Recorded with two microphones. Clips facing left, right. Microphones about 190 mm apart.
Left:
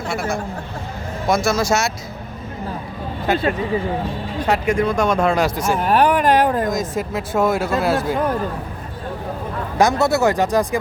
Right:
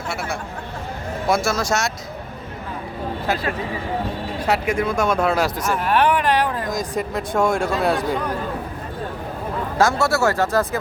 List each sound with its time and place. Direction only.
1.5 s speech: centre (ahead or behind)
3.3 s speech: centre (ahead or behind)
4.4 s speech: 5° right (ahead or behind)
5.5 s speech: 25° left (ahead or behind)
5.9 s a sound: 40° left (ahead or behind)
6.7 s speech: centre (ahead or behind)
9.7 s speech: 20° left (ahead or behind)